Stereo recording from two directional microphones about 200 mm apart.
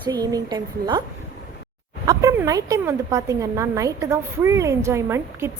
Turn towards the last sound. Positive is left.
turn(degrees=-15)  # may be behind; listen again after turning